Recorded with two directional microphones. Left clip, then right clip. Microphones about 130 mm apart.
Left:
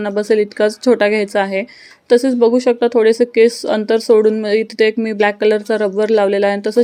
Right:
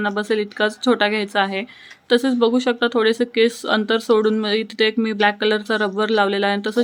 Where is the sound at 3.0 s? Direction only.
30° left (ahead or behind).